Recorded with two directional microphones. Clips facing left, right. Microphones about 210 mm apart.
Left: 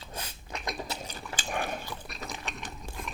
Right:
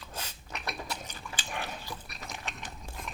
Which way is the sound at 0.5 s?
15° left (ahead or behind).